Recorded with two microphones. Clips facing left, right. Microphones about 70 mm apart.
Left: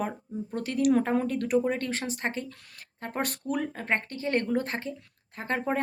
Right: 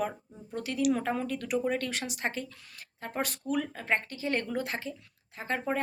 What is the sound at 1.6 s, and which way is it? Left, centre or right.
Speech, left.